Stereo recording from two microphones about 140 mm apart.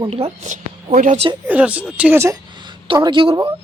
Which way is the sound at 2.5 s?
35° right (ahead or behind).